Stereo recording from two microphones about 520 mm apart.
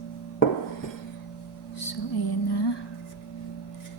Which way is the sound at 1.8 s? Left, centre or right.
Left.